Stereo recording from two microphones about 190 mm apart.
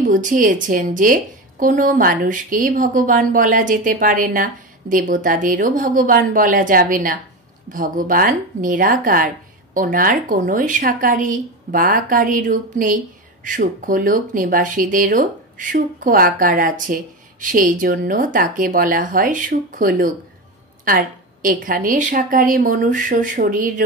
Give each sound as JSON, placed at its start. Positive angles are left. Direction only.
{"t": 0.1, "sound": "speech", "side_deg": -45}